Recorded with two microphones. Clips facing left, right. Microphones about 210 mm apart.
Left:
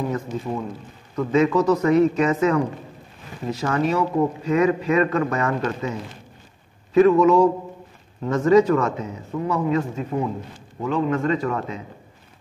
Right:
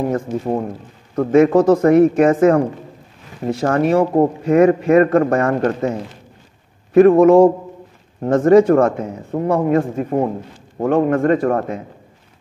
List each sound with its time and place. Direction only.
0.0 s a man's voice: 50° right (ahead or behind)